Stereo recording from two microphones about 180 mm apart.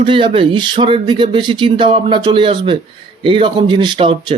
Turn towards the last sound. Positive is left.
turn(degrees=-25)  # may be behind; listen again after turning